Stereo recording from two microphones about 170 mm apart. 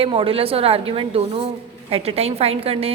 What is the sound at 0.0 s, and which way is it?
A woman's voice, 30° right (ahead or behind).